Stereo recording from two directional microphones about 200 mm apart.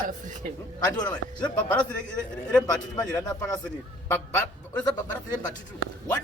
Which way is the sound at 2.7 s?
20° left (ahead or behind).